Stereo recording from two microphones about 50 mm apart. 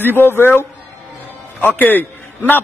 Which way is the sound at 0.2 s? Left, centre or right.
Left.